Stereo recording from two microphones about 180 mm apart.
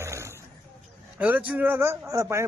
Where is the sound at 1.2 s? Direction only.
10° right (ahead or behind).